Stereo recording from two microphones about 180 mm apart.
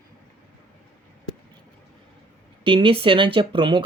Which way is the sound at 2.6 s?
30° right (ahead or behind).